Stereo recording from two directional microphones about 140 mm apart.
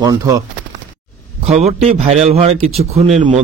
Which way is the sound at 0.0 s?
25° right (ahead or behind).